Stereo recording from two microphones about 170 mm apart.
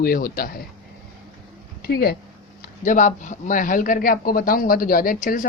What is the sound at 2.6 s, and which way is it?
Speech, 50° left (ahead or behind).